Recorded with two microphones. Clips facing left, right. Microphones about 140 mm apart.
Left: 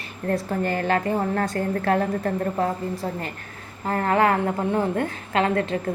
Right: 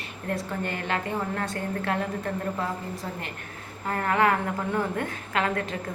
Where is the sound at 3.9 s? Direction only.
30° left (ahead or behind).